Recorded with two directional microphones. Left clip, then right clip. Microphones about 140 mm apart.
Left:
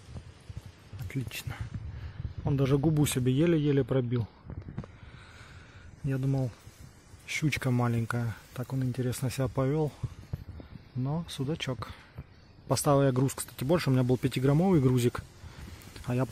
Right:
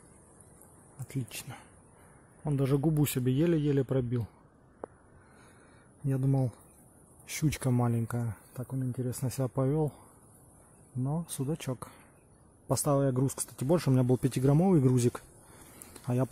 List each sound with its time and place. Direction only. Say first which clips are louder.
1.0 s speech: left 2 dB; 10° right (ahead or behind)
6.0 s speech: right 1 dB; 20° right (ahead or behind)
7.7 s speech: left 1 dB; 10° right (ahead or behind); by 9.1 s 10° left (ahead or behind)
9.1 s speech: left 2 dB; 5° right (ahead or behind)
11.2 s speech: left 2 dB; 15° right (ahead or behind)
12.9 s speech: left 3 dB; 10° left (ahead or behind)
13.6 s speech: left 1 dB; 15° right (ahead or behind)
15.9 s a sound: even; 10° right (ahead or behind)